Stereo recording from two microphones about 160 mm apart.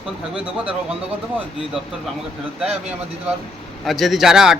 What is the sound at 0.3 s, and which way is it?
Speech, 10° right (ahead or behind).